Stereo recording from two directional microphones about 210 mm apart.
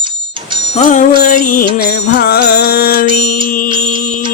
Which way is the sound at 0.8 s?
35° left (ahead or behind).